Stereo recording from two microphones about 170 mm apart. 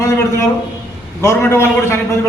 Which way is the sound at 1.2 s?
15° left (ahead or behind).